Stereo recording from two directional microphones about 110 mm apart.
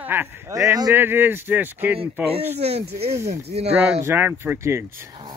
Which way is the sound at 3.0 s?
25° right (ahead or behind).